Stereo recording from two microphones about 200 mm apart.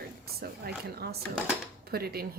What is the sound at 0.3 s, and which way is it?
A woman's voice, 50° right (ahead or behind).